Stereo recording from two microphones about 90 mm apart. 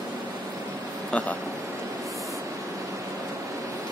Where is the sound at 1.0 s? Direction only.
15° left (ahead or behind).